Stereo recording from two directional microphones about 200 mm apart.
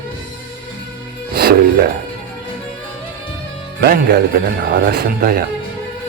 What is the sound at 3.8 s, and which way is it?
A man's voice, 50° right (ahead or behind).